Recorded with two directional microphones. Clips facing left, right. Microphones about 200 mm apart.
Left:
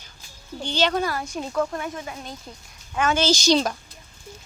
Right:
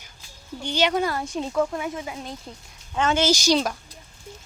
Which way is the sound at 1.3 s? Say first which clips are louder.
Right 1 dB; centre (ahead or behind).